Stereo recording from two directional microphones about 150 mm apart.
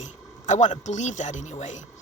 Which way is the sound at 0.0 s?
55° left (ahead or behind).